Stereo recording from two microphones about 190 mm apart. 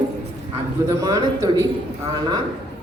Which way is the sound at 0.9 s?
20° right (ahead or behind).